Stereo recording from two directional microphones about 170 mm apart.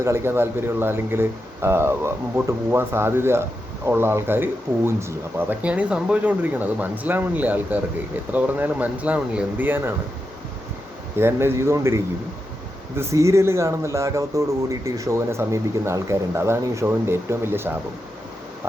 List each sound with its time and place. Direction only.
0.0 s speech: 15° right (ahead or behind)
11.2 s speech: 15° right (ahead or behind)
13.0 s speech: 15° right (ahead or behind)